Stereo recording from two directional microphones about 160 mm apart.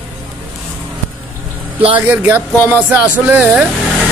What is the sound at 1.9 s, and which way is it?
Speech, 10° right (ahead or behind).